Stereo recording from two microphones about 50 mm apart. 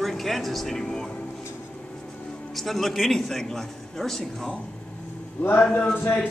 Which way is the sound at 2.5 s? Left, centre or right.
Centre.